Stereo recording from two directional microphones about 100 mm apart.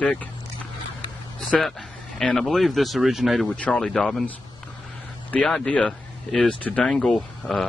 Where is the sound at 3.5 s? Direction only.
10° left (ahead or behind).